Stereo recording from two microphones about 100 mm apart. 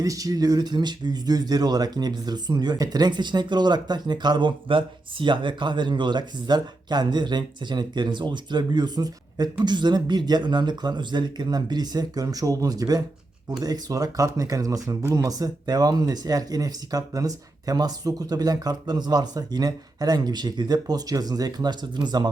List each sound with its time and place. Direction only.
0.0 s speech: 35° right (ahead or behind)